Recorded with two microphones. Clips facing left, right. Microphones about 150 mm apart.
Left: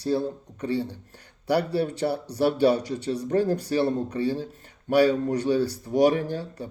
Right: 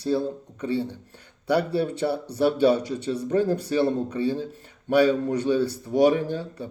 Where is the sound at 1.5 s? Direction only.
25° right (ahead or behind).